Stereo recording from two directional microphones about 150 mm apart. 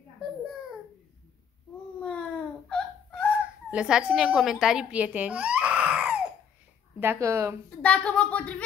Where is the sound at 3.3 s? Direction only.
5° right (ahead or behind).